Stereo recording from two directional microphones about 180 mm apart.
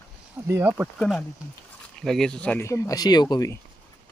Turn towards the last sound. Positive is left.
turn(degrees=20)  # may be behind; listen again after turning